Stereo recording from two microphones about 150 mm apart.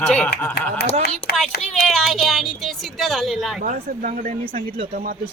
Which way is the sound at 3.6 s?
65° right (ahead or behind).